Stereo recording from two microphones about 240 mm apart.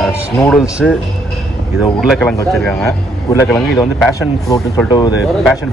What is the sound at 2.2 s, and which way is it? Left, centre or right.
Speech, centre.